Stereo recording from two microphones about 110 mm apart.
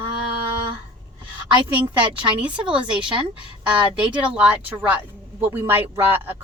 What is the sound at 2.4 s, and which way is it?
A woman's voice, 10° right (ahead or behind).